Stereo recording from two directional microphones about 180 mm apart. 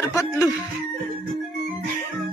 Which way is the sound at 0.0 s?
15° left (ahead or behind).